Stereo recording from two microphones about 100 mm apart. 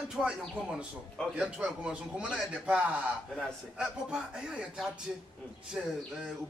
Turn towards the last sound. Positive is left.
turn(degrees=-5)  # may be behind; listen again after turning